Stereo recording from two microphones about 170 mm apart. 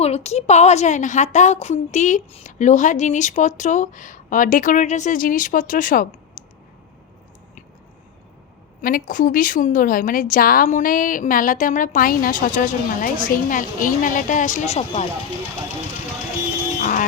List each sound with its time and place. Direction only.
0.0 s a woman's voice: 40° left (ahead or behind)
6.4 s clicking: 50° left (ahead or behind)
8.8 s a woman's voice: 55° left (ahead or behind); by 15.0 s 40° left (ahead or behind)
16.8 s music: 50° left (ahead or behind)